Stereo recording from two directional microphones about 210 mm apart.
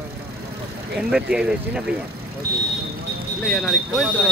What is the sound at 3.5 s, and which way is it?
Speech, centre (ahead or behind).